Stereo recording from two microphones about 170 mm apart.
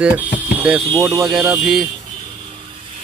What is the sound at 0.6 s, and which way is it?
Speech, 10° right (ahead or behind).